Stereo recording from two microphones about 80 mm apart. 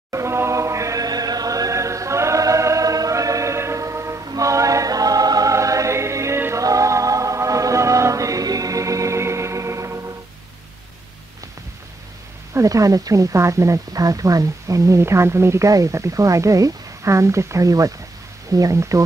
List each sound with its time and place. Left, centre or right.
0.1 s chant: right
4.2 s music: right
12.5 s speech: right